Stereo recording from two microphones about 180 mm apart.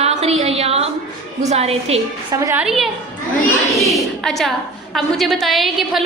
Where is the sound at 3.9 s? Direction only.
Centre (ahead or behind).